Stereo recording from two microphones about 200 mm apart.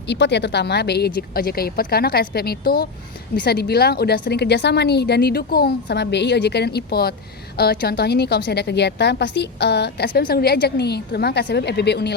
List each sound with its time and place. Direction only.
0.1 s a woman's voice: 60° left (ahead or behind)